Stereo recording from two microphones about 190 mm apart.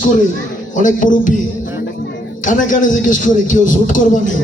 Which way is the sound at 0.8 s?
45° left (ahead or behind).